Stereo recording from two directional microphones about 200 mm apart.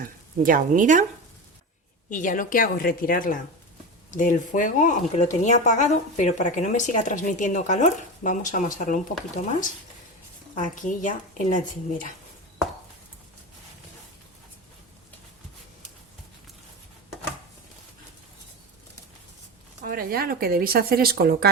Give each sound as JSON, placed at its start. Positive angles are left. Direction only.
{"t": 0.0, "sound": "speech", "side_deg": -45}
{"t": 2.0, "sound": "a woman's voice", "side_deg": 40}
{"t": 10.5, "sound": "speech", "side_deg": 40}
{"t": 19.8, "sound": "speech", "side_deg": -45}